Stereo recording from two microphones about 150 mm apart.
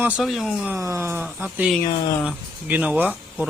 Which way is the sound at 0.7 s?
20° right (ahead or behind).